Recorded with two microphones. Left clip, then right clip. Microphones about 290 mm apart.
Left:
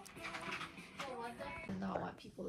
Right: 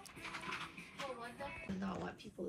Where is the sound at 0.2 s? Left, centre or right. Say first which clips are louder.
Left 1 dB; centre.